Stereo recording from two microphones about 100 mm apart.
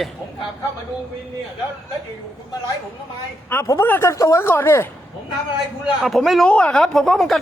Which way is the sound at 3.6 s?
30° left (ahead or behind).